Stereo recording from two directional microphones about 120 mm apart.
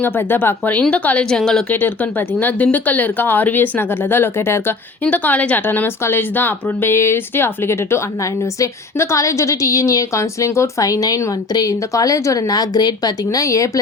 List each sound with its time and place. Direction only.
0.0 s speech: 15° left (ahead or behind)
1.7 s a woman's voice: 15° left (ahead or behind)